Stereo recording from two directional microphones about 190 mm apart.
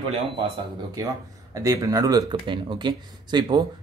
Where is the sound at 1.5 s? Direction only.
20° right (ahead or behind).